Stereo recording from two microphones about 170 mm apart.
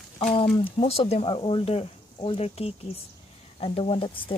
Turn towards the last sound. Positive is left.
turn(degrees=30)  # may be behind; listen again after turning